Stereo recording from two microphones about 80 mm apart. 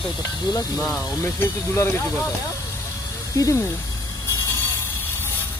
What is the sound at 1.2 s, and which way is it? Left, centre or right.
Speech, left.